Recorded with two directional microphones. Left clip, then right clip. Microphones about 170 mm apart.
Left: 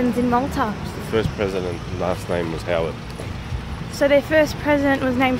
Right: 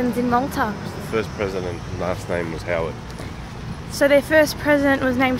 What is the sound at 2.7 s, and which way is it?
Speech, 40° left (ahead or behind).